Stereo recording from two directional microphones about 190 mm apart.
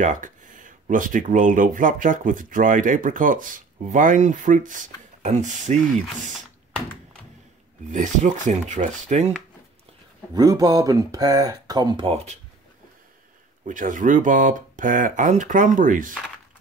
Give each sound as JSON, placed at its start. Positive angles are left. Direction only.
{"t": 0.0, "sound": "speech", "side_deg": -40}
{"t": 7.9, "sound": "speech", "side_deg": -40}
{"t": 10.3, "sound": "speech", "side_deg": -20}
{"t": 13.7, "sound": "speech", "side_deg": -45}